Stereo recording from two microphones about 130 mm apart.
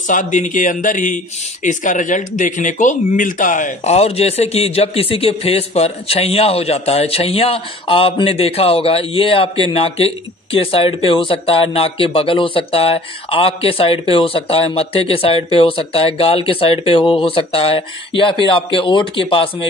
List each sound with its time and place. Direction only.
0.1 s speech: 75° left (ahead or behind); by 19.7 s 45° left (ahead or behind)